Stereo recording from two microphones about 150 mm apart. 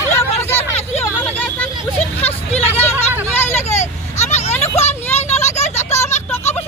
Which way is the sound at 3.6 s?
50° left (ahead or behind).